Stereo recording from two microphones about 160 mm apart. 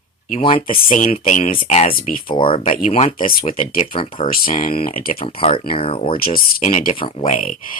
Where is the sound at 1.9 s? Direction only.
60° left (ahead or behind).